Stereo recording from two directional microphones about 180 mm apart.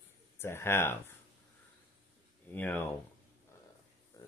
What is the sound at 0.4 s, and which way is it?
Speech, 15° left (ahead or behind).